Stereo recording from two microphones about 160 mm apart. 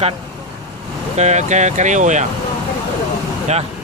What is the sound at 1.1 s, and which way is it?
Speech, 45° right (ahead or behind).